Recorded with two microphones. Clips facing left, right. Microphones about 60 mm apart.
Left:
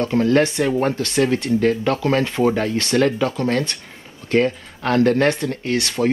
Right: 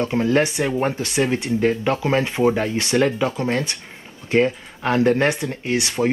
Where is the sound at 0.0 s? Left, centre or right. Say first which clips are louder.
Left 2 dB; centre.